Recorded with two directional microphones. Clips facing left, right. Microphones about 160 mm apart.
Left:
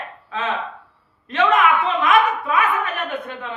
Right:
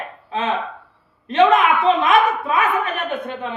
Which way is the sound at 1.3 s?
20° right (ahead or behind).